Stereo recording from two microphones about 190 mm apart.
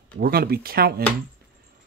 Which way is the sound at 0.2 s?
55° right (ahead or behind).